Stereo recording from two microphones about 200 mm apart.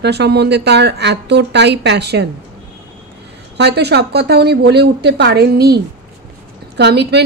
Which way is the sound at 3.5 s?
55° right (ahead or behind).